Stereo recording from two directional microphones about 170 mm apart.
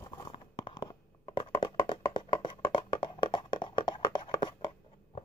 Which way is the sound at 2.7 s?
30° left (ahead or behind).